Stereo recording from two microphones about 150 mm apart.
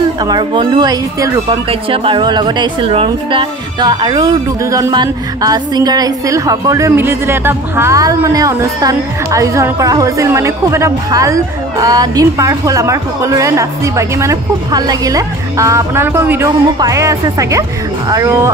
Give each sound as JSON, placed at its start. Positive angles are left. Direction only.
{"t": 0.2, "sound": "a woman's voice", "side_deg": -30}